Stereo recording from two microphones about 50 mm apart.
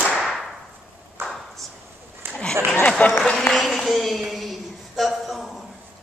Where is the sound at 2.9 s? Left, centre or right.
Left.